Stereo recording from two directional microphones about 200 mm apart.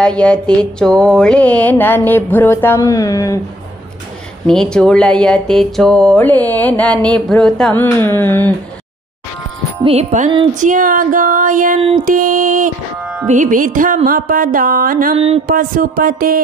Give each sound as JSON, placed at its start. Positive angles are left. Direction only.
{"t": 0.0, "sound": "speech", "side_deg": 5}
{"t": 4.5, "sound": "speech", "side_deg": 5}
{"t": 9.8, "sound": "speech", "side_deg": -35}
{"t": 12.0, "sound": "music", "side_deg": -45}
{"t": 15.1, "sound": "speech", "side_deg": -30}
{"t": 15.4, "sound": "music", "side_deg": -45}